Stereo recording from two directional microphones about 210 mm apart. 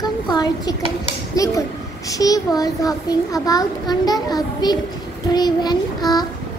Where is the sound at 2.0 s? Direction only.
15° left (ahead or behind).